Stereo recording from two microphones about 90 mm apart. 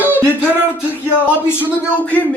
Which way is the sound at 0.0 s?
20° right (ahead or behind).